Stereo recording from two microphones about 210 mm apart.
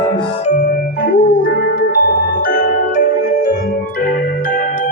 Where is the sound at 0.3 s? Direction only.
35° left (ahead or behind).